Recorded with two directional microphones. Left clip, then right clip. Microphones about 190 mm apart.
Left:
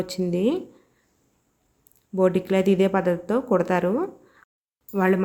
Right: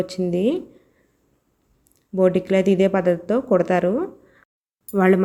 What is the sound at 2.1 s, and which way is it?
Speech, 10° right (ahead or behind).